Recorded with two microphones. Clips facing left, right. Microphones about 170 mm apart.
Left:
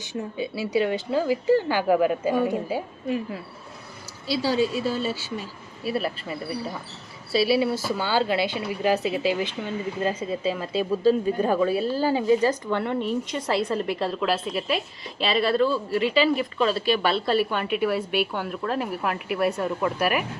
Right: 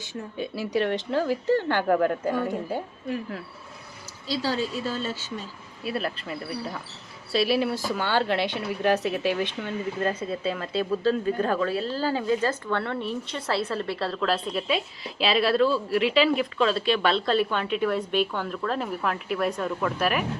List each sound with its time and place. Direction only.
0.3 s a woman's voice: 5° left (ahead or behind)